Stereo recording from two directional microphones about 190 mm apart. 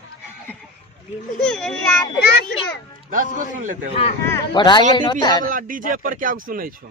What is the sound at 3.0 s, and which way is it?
Speech, 45° right (ahead or behind).